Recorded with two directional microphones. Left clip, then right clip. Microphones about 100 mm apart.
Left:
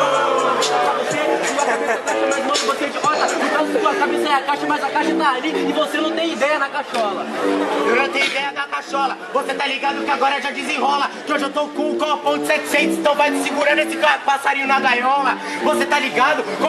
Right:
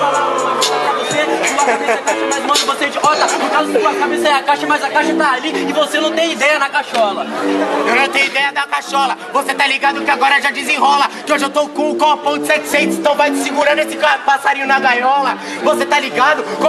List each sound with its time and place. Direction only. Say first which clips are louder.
1.4 s music: right 5 dB; 20° right (ahead or behind)
3.0 s speech: right 6 dB; 20° right (ahead or behind)
5.9 s a man's voice: right 5 dB; 15° right (ahead or behind)
7.9 s speech: right 5 dB; 20° right (ahead or behind)
9.6 s a man's voice: right 6 dB; 15° right (ahead or behind)